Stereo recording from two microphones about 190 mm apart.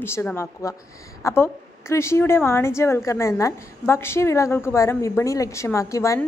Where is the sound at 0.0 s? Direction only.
10° left (ahead or behind).